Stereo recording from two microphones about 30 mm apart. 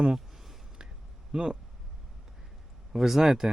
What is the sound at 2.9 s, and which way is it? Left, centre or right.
Speech, centre.